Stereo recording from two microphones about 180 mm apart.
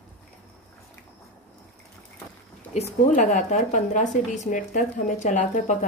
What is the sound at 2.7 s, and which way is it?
Speech, 40° left (ahead or behind).